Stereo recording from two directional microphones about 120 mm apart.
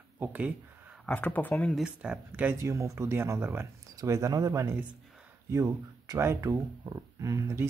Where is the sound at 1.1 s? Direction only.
15° left (ahead or behind).